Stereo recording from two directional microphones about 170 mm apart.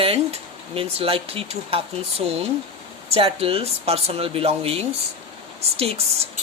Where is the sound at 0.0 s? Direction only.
35° right (ahead or behind).